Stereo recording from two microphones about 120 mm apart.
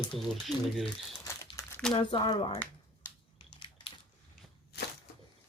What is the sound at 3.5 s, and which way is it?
Crushing, 45° left (ahead or behind).